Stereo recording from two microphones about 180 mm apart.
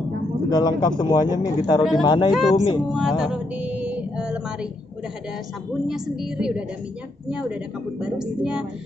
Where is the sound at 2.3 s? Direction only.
Centre (ahead or behind).